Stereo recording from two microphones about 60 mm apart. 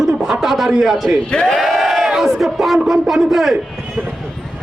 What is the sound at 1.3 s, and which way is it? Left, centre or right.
Speech, centre.